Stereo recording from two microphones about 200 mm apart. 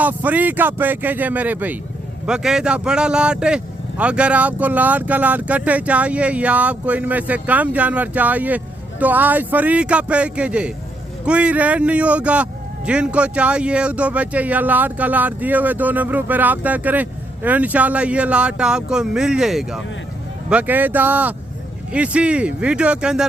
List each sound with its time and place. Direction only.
0.0 s speech: 10° right (ahead or behind)